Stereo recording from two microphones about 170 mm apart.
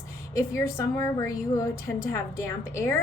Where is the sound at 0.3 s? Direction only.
15° left (ahead or behind).